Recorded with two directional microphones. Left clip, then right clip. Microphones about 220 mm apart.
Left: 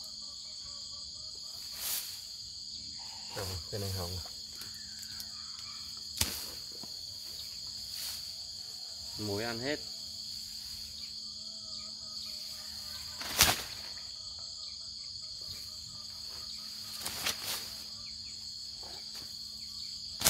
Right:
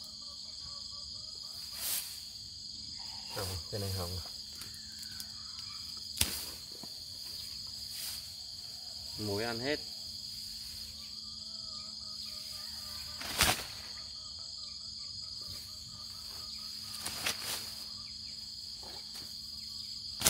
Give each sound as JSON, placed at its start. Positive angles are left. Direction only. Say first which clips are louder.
{"t": 3.3, "sound": "insect", "louder": "even", "side_deg": 0}
{"t": 6.2, "sound": "cricket", "louder": "even", "side_deg": 5}
{"t": 9.2, "sound": "insect", "louder": "even", "side_deg": 0}
{"t": 13.4, "sound": "a sound", "louder": "left 2 dB", "side_deg": 40}